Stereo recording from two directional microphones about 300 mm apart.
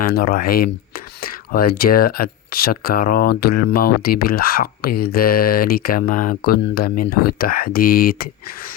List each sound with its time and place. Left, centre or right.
0.0 s speech: left